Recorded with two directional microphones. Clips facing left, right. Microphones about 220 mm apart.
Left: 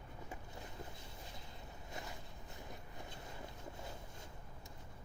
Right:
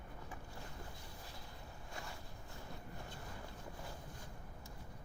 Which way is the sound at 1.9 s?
20° left (ahead or behind).